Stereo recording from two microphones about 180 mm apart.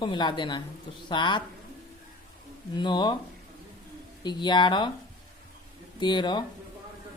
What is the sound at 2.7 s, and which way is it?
Speech, 25° left (ahead or behind).